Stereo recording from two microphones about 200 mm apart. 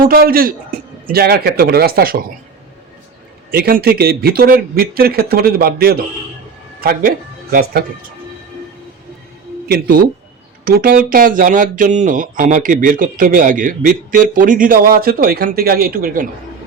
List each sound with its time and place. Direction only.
0.0 s a man's voice: 50° right (ahead or behind)
3.5 s speech: 50° right (ahead or behind)
9.6 s speech: 50° right (ahead or behind)